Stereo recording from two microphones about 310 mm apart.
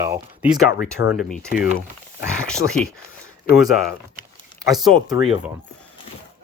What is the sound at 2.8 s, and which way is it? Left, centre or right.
Speech, centre.